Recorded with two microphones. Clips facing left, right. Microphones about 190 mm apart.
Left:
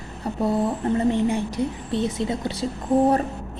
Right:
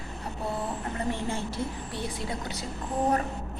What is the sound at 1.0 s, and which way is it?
A woman's voice, 20° left (ahead or behind).